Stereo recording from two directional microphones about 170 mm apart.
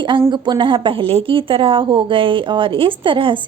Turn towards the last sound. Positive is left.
turn(degrees=-30)  # may be behind; listen again after turning